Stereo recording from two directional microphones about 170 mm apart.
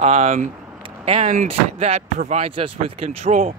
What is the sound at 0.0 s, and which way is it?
Speech, 40° right (ahead or behind).